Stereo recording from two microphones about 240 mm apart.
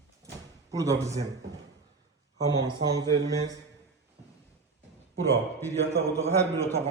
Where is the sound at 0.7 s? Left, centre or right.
Centre.